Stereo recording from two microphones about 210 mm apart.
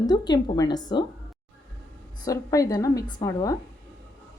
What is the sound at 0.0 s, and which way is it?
A woman's voice, 20° left (ahead or behind).